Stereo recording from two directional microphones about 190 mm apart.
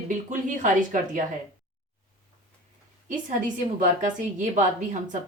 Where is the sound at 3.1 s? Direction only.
45° right (ahead or behind).